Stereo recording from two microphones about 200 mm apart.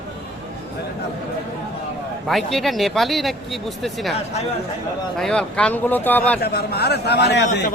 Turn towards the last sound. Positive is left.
turn(degrees=60)  # may be behind; listen again after turning